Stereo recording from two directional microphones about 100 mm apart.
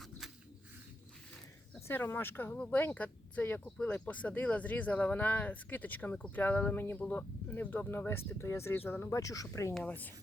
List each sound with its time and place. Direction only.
1.9 s speech: 20° left (ahead or behind)
9.8 s speech: 15° left (ahead or behind)